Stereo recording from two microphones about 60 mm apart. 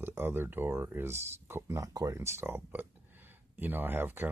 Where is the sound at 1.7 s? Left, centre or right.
Right.